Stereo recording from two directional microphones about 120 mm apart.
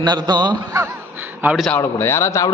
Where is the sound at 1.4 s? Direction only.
15° right (ahead or behind).